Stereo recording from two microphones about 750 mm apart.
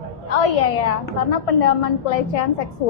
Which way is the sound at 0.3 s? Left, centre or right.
Left.